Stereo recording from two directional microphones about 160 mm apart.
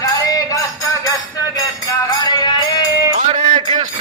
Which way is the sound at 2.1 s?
25° left (ahead or behind).